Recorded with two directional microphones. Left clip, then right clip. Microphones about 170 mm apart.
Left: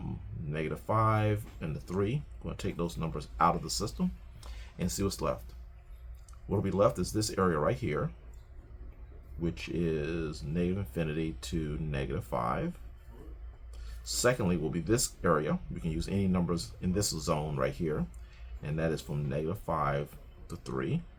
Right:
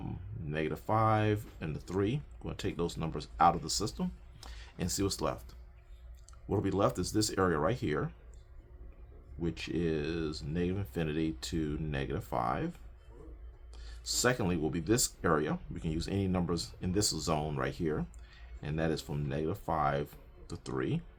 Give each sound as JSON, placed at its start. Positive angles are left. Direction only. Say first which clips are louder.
{"t": 0.5, "sound": "speech", "louder": "even", "side_deg": -55}
{"t": 6.5, "sound": "speech", "louder": "left 3 dB", "side_deg": -65}
{"t": 9.4, "sound": "speech", "louder": "even", "side_deg": -60}
{"t": 14.0, "sound": "speech", "louder": "left 2 dB", "side_deg": -60}